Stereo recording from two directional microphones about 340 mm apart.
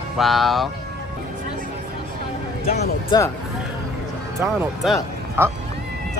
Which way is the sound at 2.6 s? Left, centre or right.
Centre.